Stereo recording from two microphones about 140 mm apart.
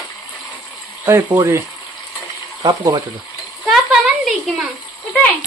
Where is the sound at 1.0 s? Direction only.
20° right (ahead or behind).